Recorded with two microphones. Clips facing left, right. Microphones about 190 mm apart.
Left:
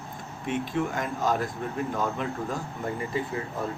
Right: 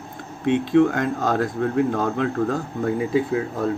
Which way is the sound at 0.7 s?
90° right.